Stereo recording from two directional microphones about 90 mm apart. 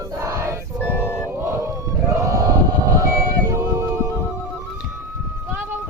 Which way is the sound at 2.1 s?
35° right (ahead or behind).